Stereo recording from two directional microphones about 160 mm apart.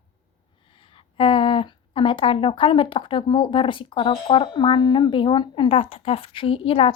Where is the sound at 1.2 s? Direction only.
35° left (ahead or behind).